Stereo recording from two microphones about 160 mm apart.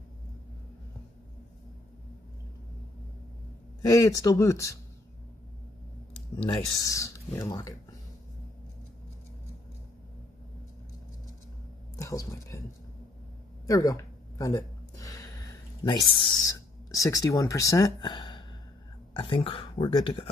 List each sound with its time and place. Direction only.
3.8 s speech: 20° left (ahead or behind)
6.3 s speech: 20° left (ahead or behind)
12.0 s speech: 20° left (ahead or behind)
13.7 s speech: 20° left (ahead or behind)
14.4 s a sound: 20° left (ahead or behind)
16.5 s speech: 20° left (ahead or behind)